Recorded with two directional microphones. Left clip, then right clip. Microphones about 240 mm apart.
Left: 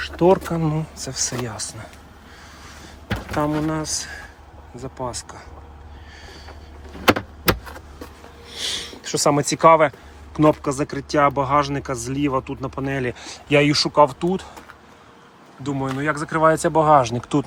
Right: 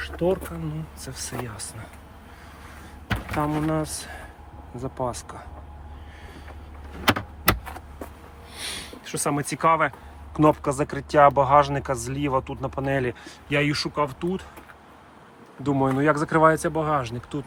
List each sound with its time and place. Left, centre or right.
0.0 s bee: centre
0.9 s speech: centre
3.3 s speech: centre
8.4 s a sound: centre
10.3 s speech: centre
15.6 s speech: centre
16.6 s speech: centre